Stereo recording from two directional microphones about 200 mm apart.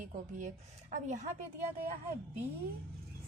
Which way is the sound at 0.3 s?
40° right (ahead or behind).